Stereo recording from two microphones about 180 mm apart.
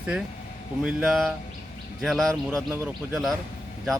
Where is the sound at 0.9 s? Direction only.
5° right (ahead or behind).